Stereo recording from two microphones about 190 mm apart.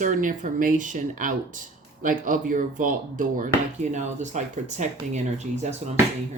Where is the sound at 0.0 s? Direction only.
45° right (ahead or behind).